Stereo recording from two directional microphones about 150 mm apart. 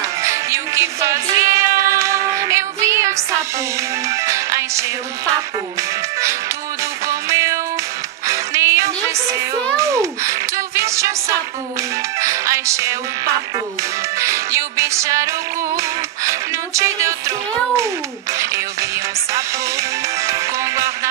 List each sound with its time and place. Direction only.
0.2 s music: 20° right (ahead or behind)
4.3 s music: 20° right (ahead or behind)
7.1 s music: 20° right (ahead or behind)
14.2 s music: 20° right (ahead or behind)
16.3 s music: 20° right (ahead or behind)
20.2 s music: 20° right (ahead or behind)